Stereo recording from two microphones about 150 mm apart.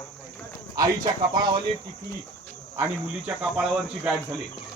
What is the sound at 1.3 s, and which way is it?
Speech, 30° right (ahead or behind).